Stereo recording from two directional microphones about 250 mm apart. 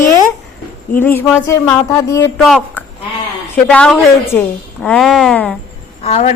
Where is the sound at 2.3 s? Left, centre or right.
Centre.